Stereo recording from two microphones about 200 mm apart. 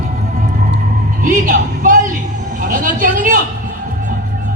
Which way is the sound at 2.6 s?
40° right (ahead or behind).